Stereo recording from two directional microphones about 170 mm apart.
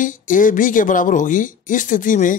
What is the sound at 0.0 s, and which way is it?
Speech, 50° left (ahead or behind).